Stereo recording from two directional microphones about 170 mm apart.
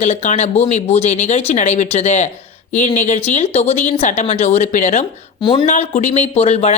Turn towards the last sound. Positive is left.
turn(degrees=40)  # may be behind; listen again after turning